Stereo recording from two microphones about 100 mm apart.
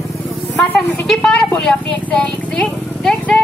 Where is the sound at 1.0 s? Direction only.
5° left (ahead or behind).